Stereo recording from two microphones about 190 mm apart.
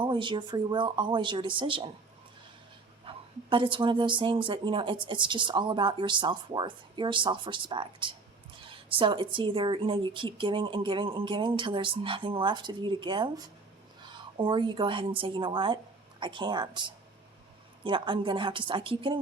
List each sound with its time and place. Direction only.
0.0 s speech: 25° right (ahead or behind)
3.0 s speech: 25° right (ahead or behind)